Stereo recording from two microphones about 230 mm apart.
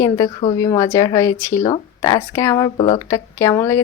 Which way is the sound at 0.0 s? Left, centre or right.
Centre.